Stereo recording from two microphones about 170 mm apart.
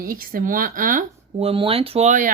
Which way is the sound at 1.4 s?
35° right (ahead or behind).